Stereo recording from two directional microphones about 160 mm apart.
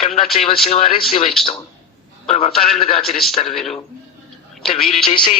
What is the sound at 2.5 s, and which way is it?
Speech, centre (ahead or behind).